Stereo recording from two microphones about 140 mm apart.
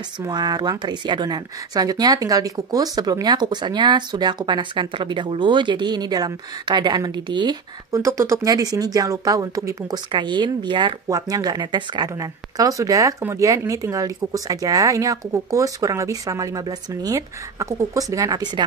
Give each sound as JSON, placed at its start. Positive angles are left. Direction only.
{"t": 0.2, "sound": "a woman's voice", "side_deg": -30}
{"t": 7.9, "sound": "a woman's voice", "side_deg": -20}